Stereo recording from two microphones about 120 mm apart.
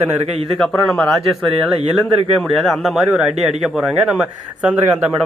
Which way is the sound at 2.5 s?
Centre (ahead or behind).